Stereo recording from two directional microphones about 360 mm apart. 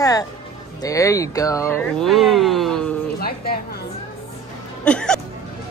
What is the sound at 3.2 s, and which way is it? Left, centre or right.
Speech, left.